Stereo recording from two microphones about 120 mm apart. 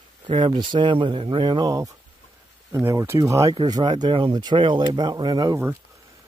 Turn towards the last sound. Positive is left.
turn(degrees=-35)  # may be behind; listen again after turning